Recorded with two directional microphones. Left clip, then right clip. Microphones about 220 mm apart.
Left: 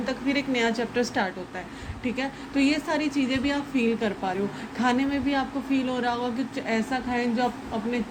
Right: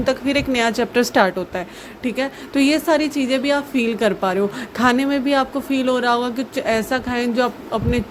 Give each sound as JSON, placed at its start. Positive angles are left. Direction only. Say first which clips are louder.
{"t": 0.0, "sound": "speech", "louder": "right 8 dB", "side_deg": -55}